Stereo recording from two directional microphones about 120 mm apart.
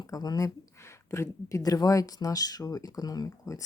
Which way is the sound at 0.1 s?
30° left (ahead or behind).